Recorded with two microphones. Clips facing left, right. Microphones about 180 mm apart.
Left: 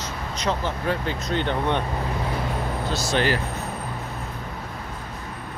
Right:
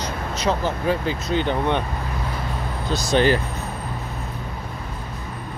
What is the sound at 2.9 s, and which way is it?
Speech, 15° right (ahead or behind).